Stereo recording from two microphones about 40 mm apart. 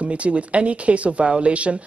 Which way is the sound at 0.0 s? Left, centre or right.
Right.